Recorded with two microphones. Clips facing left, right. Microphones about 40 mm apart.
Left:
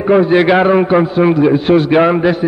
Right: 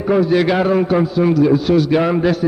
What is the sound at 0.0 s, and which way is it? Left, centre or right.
A man's voice, left.